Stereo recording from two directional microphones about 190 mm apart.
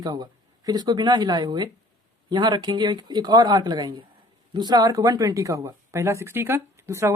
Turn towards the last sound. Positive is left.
turn(degrees=-15)  # may be behind; listen again after turning